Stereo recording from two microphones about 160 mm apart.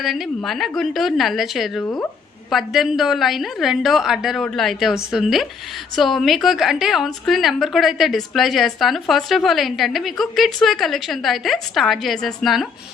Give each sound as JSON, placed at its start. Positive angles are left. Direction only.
{"t": 0.0, "sound": "a woman's voice", "side_deg": 0}
{"t": 1.8, "sound": "speech", "side_deg": 15}
{"t": 2.5, "sound": "a woman's voice", "side_deg": 0}